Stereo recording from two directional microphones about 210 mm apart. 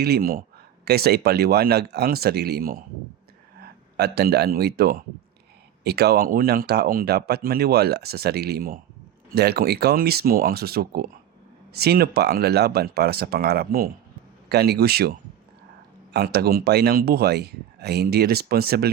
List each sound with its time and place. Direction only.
0.0 s speech: 45° right (ahead or behind)
3.9 s speech: 50° right (ahead or behind)
16.1 s speech: 50° right (ahead or behind)